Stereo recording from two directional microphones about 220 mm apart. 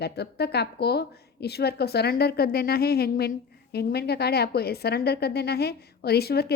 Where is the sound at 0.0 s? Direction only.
45° left (ahead or behind).